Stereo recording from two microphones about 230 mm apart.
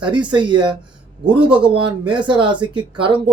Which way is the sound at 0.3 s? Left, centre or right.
Centre.